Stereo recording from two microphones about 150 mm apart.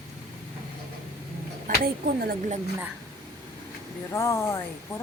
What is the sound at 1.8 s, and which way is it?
Speech, 90° right.